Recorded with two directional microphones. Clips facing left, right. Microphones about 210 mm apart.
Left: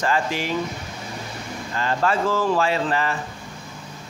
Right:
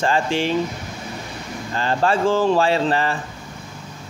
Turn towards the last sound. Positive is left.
turn(degrees=-30)  # may be behind; listen again after turning